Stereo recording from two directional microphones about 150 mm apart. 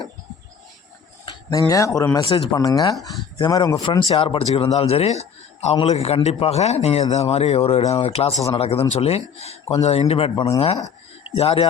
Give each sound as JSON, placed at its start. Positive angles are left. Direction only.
{"t": 1.2, "sound": "speech", "side_deg": 25}
{"t": 2.2, "sound": "a man's voice", "side_deg": 35}
{"t": 2.6, "sound": "a man's voice", "side_deg": 25}